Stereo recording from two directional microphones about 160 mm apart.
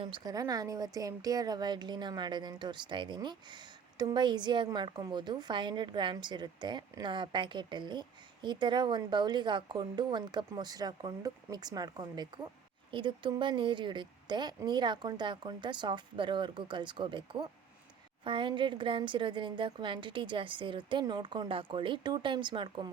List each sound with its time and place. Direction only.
0.0 s a woman's voice: 30° right (ahead or behind)